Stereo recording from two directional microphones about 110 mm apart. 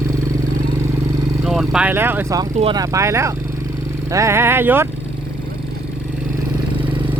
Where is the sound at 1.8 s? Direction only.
20° right (ahead or behind).